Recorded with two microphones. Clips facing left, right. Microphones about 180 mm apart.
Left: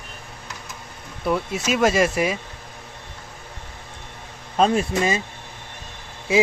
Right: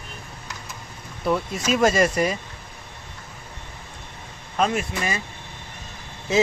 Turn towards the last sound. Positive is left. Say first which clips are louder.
# left 1 dB
turn(degrees=10)  # may be behind; listen again after turning